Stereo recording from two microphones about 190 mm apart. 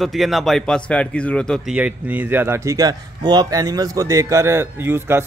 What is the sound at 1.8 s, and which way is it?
Speech, 10° right (ahead or behind).